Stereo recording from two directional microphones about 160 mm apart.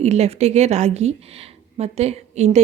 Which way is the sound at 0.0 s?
45° right (ahead or behind).